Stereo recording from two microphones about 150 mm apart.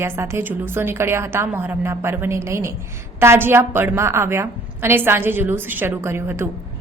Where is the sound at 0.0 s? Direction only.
15° right (ahead or behind).